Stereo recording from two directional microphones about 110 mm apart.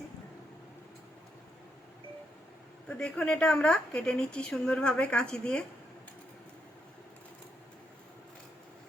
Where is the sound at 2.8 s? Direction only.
10° left (ahead or behind).